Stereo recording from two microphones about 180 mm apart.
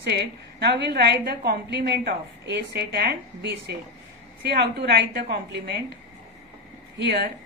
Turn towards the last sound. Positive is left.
turn(degrees=-70)  # may be behind; listen again after turning